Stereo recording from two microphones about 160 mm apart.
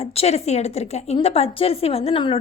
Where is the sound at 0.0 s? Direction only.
40° left (ahead or behind).